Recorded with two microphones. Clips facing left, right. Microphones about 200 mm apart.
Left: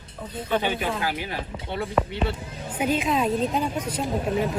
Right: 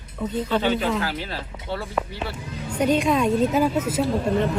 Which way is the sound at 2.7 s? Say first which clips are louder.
Right 4 dB; 5° left (ahead or behind).